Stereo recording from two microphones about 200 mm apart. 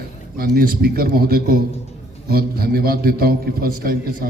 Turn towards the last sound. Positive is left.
turn(degrees=-45)  # may be behind; listen again after turning